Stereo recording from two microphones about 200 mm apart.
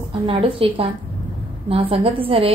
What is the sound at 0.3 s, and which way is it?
A woman's voice, 30° right (ahead or behind).